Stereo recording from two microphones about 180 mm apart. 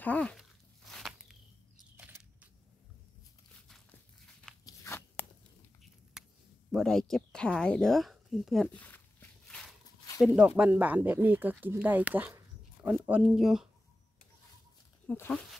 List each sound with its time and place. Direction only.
0.0 s walk: 10° left (ahead or behind); by 2.5 s 10° right (ahead or behind)
4.6 s crunch: 15° left (ahead or behind)
6.2 s a sound: 5° right (ahead or behind)
6.7 s speech: centre (ahead or behind)
9.5 s walk: centre (ahead or behind)
10.2 s speech: 5° right (ahead or behind)
15.0 s speech: 10° left (ahead or behind)